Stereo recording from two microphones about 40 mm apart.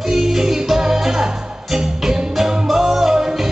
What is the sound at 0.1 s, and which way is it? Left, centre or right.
Music, centre.